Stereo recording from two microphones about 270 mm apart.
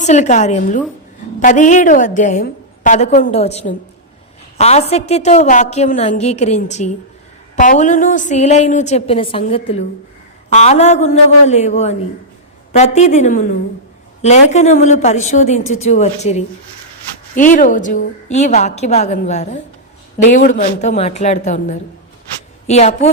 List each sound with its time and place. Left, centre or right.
0.0 s a woman's voice: left